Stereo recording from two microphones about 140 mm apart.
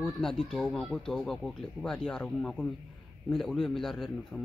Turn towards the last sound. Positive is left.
turn(degrees=0)  # may be behind; listen again after turning